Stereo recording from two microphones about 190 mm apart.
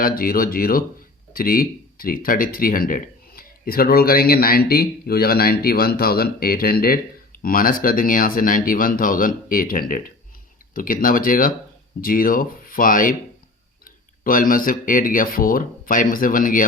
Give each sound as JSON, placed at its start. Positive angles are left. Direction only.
{"t": 0.0, "sound": "speech", "side_deg": 50}